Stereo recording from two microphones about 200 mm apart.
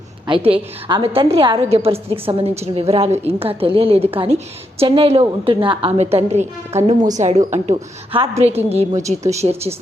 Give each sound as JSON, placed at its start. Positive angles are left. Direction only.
{"t": 0.3, "sound": "a woman's voice", "side_deg": -25}
{"t": 8.9, "sound": "speech", "side_deg": -15}
{"t": 9.4, "sound": "a woman's voice", "side_deg": -30}